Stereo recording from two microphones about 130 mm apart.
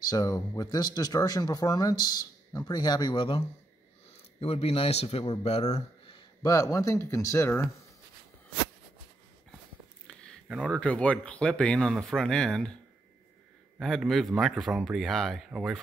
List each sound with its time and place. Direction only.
0.0 s a man's voice: 30° left (ahead or behind); by 6.2 s 50° left (ahead or behind)
6.4 s speech: 25° left (ahead or behind)
10.0 s speech: 5° left (ahead or behind)
13.7 s speech: centre (ahead or behind)